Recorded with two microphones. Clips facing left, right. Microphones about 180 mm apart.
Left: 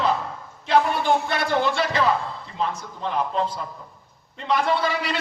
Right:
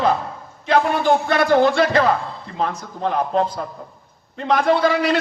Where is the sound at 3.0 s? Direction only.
45° right (ahead or behind).